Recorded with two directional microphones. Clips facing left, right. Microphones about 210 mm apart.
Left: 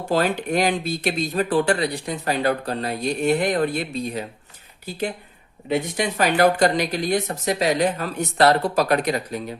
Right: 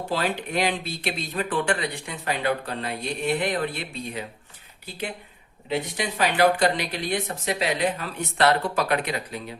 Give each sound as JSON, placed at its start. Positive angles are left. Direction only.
{"t": 0.1, "sound": "speech", "side_deg": 45}
{"t": 5.6, "sound": "speech", "side_deg": 45}